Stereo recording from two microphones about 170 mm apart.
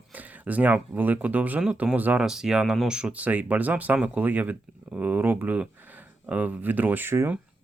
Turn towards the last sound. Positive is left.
turn(degrees=-15)  # may be behind; listen again after turning